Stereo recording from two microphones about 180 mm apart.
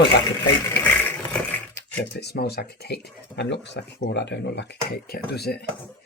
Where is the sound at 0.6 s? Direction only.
10° left (ahead or behind).